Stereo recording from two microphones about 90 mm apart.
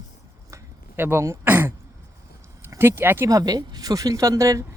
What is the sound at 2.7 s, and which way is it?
Speech, 25° right (ahead or behind).